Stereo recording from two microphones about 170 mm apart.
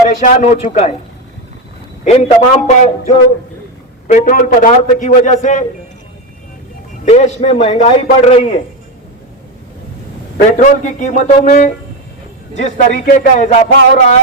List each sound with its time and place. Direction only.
0.3 s a man's voice: 40° left (ahead or behind)
2.0 s a man's voice: 40° left (ahead or behind)
7.0 s a man's voice: 40° left (ahead or behind)
10.6 s speech: 45° left (ahead or behind)